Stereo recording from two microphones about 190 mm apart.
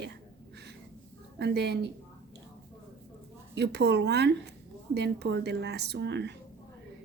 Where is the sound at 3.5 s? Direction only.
60° right (ahead or behind).